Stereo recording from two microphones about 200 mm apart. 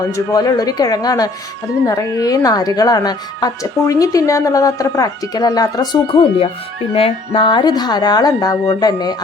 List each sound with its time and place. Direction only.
0.1 s a woman's voice: 20° left (ahead or behind)